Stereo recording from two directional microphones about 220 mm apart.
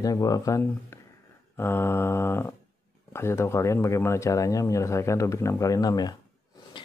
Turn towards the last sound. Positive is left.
turn(degrees=15)  # may be behind; listen again after turning